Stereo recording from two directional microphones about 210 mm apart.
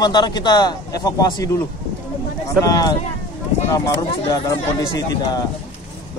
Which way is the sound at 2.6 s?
15° left (ahead or behind).